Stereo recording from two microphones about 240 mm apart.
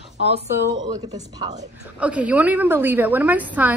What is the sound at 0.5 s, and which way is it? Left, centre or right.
A woman's voice, centre.